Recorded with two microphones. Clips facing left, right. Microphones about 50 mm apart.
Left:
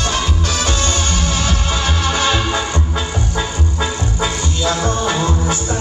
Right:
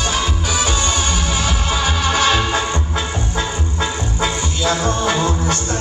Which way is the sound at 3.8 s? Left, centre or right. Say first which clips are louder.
Even; centre.